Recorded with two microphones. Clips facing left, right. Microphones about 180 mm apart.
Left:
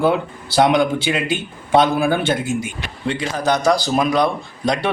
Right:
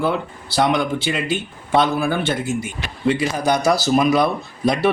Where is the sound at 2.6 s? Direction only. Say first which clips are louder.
Right 4 dB; 5° right (ahead or behind).